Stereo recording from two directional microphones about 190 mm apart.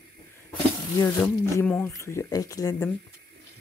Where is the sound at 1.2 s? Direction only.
5° left (ahead or behind).